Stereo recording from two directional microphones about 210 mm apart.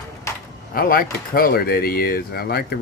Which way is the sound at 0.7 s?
45° left (ahead or behind).